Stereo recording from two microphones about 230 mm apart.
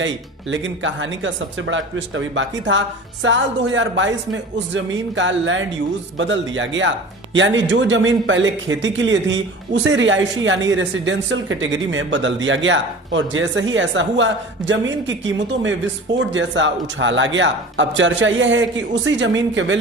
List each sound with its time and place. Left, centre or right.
0.5 s speech: right